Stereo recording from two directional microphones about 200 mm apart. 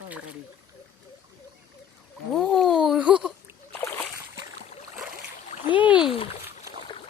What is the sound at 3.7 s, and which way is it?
Boat, 10° left (ahead or behind).